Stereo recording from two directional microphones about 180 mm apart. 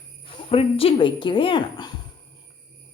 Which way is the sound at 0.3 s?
30° left (ahead or behind).